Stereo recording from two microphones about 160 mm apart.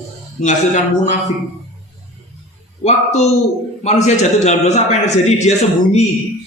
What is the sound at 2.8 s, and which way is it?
A man's voice, 45° left (ahead or behind).